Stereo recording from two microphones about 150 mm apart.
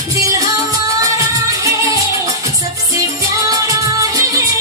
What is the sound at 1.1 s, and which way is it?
Music, 20° right (ahead or behind).